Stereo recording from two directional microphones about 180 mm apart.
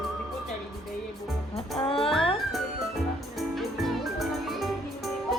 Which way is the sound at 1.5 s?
30° left (ahead or behind).